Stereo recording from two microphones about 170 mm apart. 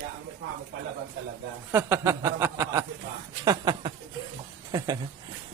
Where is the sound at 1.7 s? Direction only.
15° right (ahead or behind).